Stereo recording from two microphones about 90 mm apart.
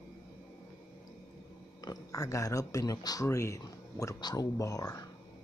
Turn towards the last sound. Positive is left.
turn(degrees=40)  # may be behind; listen again after turning